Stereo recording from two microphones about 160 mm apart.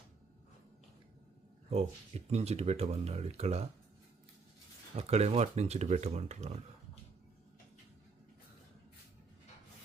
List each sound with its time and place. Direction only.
1.7 s speech: 40° right (ahead or behind)
4.9 s speech: 40° right (ahead or behind)